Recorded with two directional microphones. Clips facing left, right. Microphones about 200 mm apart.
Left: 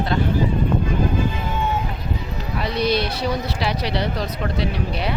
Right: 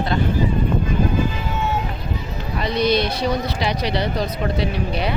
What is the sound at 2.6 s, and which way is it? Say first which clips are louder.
Speech: right 2 dB; 5° left (ahead or behind).